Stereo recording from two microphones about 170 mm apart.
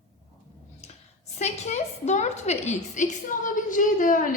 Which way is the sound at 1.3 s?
40° left (ahead or behind).